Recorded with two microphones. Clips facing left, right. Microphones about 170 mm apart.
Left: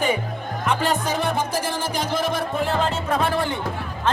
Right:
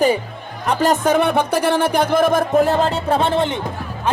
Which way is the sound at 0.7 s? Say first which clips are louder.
Right 7 dB; 40° right (ahead or behind).